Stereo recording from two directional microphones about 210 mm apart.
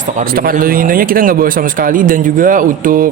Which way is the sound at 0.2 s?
45° right (ahead or behind).